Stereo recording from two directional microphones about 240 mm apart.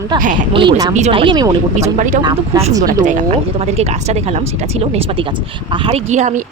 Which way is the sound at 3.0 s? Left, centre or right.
Right.